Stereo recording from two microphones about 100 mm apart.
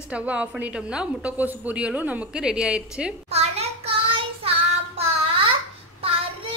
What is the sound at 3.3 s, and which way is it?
Child singing, 90° right.